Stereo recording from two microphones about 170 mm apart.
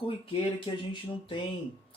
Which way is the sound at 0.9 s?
30° left (ahead or behind).